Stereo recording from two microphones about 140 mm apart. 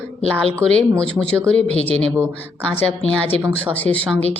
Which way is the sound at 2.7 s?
10° left (ahead or behind).